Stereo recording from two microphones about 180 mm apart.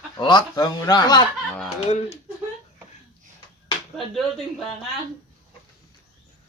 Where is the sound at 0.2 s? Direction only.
25° left (ahead or behind).